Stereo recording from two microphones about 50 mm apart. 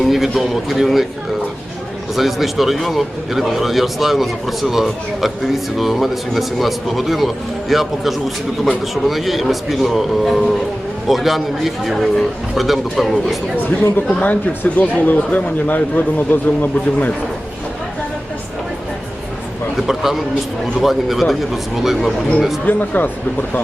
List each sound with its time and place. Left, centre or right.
0.0 s a man's voice: centre
2.1 s a man's voice: centre
14.2 s speech: left
19.7 s a man's voice: centre
22.6 s speech: left